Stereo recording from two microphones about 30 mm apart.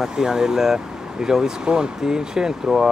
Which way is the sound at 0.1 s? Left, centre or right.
Right.